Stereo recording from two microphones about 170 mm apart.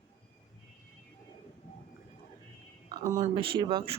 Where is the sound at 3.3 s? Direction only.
30° right (ahead or behind).